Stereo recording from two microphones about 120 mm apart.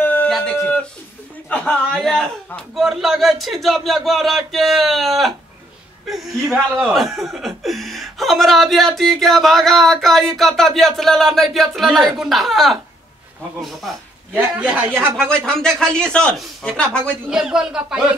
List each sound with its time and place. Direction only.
0.0 s a sound: 15° left (ahead or behind)
1.5 s speech: 10° left (ahead or behind)
14.6 s speech: 15° right (ahead or behind)
15.1 s speech: 5° left (ahead or behind)
17.3 s speech: 5° right (ahead or behind)